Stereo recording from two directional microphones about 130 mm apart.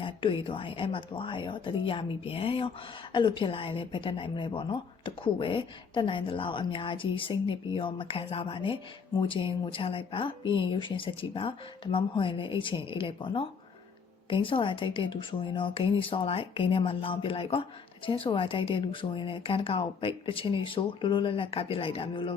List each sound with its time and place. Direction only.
0.0 s speech: 40° left (ahead or behind)